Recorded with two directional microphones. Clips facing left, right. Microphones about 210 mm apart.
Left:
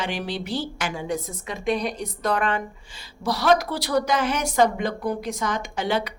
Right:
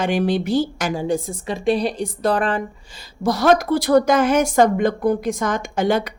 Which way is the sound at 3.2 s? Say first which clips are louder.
Right 4 dB; 50° right (ahead or behind).